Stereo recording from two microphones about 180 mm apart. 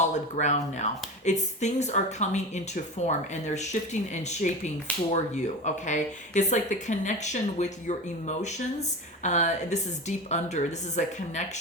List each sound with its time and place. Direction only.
0.0 s speech: 40° left (ahead or behind)